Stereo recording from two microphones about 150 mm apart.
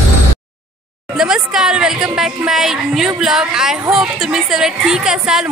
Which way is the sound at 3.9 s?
5° right (ahead or behind).